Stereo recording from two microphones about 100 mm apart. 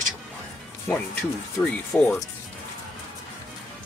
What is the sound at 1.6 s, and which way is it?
Speech, 10° left (ahead or behind).